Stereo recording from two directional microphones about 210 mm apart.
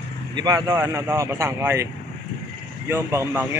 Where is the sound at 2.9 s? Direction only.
10° right (ahead or behind).